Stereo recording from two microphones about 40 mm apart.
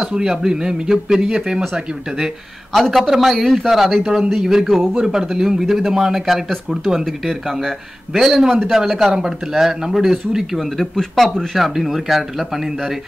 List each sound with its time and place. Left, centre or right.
0.0 s speech: centre
2.7 s speech: centre
10.8 s speech: centre
11.6 s speech: centre